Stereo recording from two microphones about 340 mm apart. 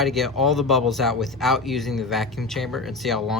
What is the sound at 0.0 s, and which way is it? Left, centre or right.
Speech, centre.